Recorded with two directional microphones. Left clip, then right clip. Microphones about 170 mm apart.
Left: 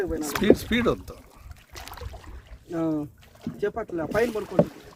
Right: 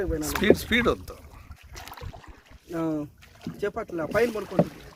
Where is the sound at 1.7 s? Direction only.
30° right (ahead or behind).